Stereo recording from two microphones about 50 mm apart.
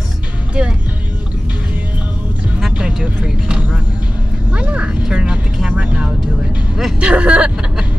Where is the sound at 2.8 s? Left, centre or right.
Right.